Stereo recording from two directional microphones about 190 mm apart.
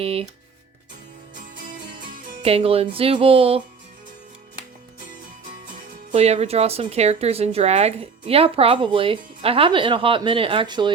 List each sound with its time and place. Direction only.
0.0 s speech: 30° right (ahead or behind)
2.4 s speech: 30° right (ahead or behind)
5.6 s speech: 30° right (ahead or behind)